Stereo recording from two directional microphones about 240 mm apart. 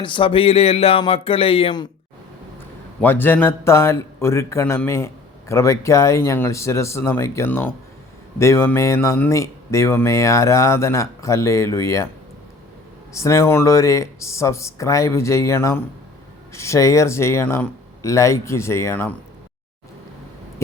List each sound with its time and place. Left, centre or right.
0.0 s speech: left
3.0 s speech: centre
13.1 s speech: centre